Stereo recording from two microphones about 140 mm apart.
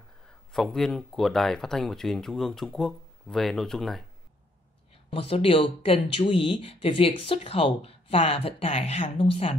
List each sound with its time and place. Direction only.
0.3 s speech: 5° left (ahead or behind)
5.1 s speech: 40° left (ahead or behind)